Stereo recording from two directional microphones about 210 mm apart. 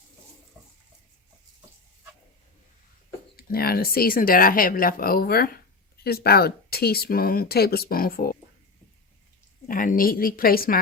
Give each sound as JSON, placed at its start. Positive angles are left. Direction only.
{"t": 3.3, "sound": "speech", "side_deg": 45}
{"t": 9.6, "sound": "a woman's voice", "side_deg": 40}